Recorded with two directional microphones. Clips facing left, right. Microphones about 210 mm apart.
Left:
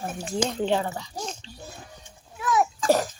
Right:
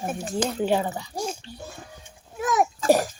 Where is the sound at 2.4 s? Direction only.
45° right (ahead or behind).